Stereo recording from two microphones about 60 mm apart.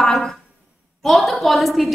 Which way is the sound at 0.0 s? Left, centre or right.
Centre.